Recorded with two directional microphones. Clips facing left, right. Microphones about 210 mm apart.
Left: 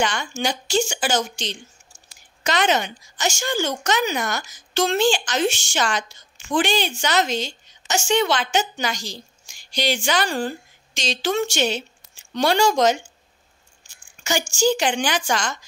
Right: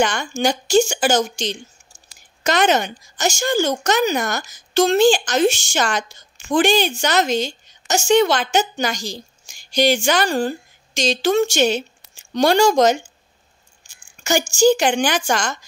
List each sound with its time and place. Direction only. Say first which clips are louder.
0.0 s speech: right 5 dB; 45° right (ahead or behind)
14.2 s speech: right 5 dB; 45° right (ahead or behind)